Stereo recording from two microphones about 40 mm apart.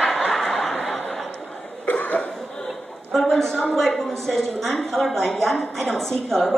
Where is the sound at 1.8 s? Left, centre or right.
Left.